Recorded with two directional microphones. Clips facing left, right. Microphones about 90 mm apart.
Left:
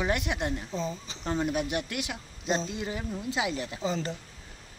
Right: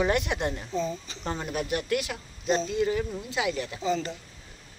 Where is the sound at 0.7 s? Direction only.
25° left (ahead or behind).